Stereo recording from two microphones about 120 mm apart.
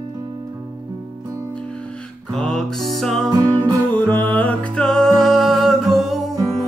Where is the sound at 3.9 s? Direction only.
15° left (ahead or behind).